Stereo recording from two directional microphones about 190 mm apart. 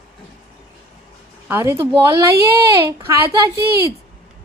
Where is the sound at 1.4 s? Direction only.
15° right (ahead or behind).